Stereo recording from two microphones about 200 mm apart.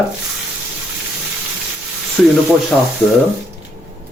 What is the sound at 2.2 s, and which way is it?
Speech, 5° left (ahead or behind).